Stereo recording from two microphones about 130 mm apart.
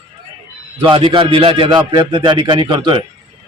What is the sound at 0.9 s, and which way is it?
A man's voice, 40° right (ahead or behind).